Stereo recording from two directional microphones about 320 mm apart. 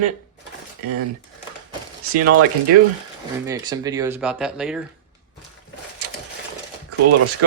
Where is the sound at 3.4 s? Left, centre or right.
Centre.